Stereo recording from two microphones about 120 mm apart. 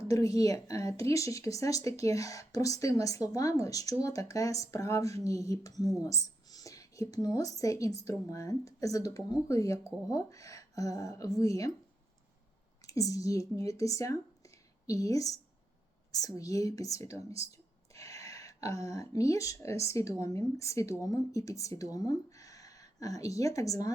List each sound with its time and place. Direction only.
0.1 s speech: 30° left (ahead or behind)
12.8 s speech: 30° left (ahead or behind)